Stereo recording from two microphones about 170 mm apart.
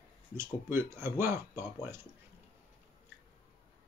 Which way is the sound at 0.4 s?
15° right (ahead or behind).